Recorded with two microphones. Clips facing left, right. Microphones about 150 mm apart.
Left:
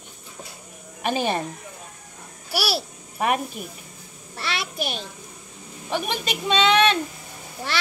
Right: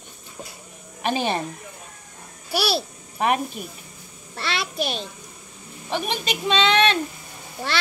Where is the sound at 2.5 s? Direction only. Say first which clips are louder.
Right 2 dB; 10° left (ahead or behind).